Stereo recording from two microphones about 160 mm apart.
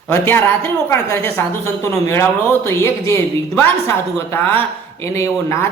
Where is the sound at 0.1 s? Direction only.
15° left (ahead or behind).